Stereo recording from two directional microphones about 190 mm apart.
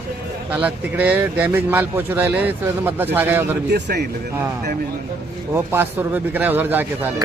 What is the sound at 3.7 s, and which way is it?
Speech, 60° right (ahead or behind).